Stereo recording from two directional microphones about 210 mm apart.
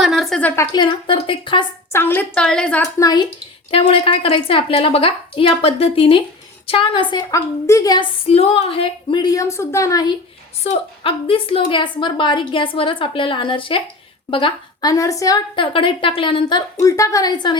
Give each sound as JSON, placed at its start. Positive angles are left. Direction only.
{"t": 0.0, "sound": "a sound", "side_deg": 0}
{"t": 0.7, "sound": "a woman's voice", "side_deg": 25}
{"t": 1.9, "sound": "a woman's voice", "side_deg": 10}
{"t": 3.0, "sound": "a woman's voice", "side_deg": 20}
{"t": 10.6, "sound": "a woman's voice", "side_deg": 25}